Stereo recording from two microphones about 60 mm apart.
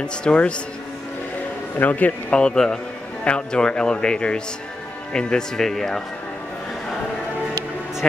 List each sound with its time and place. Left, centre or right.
0.0 s speech: centre
1.8 s a man's voice: left
2.3 s speech: centre